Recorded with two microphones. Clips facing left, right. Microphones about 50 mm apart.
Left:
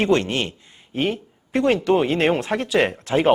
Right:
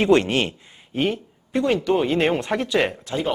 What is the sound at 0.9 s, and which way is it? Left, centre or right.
Speech, centre.